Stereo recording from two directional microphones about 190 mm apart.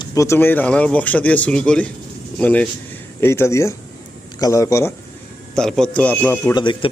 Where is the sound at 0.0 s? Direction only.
15° left (ahead or behind).